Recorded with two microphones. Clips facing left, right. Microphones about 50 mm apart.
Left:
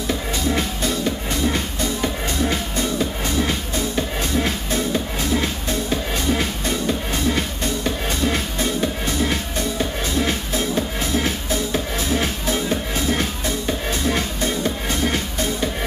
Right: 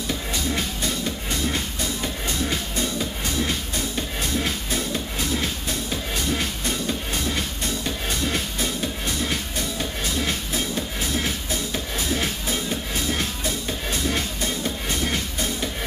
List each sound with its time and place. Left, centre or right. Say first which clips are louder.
0.1 s music: left 5 dB; centre